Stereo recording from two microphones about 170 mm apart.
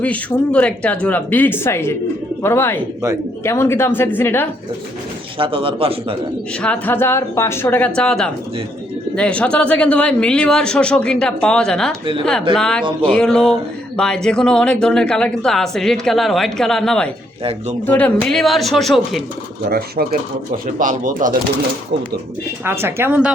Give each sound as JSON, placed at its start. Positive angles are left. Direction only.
{"t": 0.0, "sound": "speech", "side_deg": 10}
{"t": 5.4, "sound": "a man's voice", "side_deg": -35}
{"t": 6.6, "sound": "speech", "side_deg": 10}
{"t": 12.8, "sound": "a man's voice", "side_deg": -30}
{"t": 13.1, "sound": "speech", "side_deg": 5}
{"t": 19.7, "sound": "speech", "side_deg": -65}
{"t": 20.7, "sound": "speech", "side_deg": -50}
{"t": 22.6, "sound": "speech", "side_deg": -15}